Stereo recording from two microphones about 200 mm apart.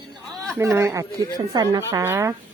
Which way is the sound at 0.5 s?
15° right (ahead or behind).